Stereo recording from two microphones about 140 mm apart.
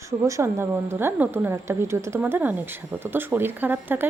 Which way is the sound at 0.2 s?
20° right (ahead or behind).